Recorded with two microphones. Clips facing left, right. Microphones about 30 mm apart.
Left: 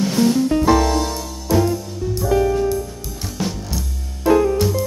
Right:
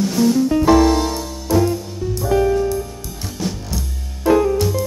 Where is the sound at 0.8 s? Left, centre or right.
Centre.